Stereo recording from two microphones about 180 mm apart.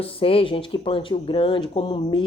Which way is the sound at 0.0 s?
30° left (ahead or behind).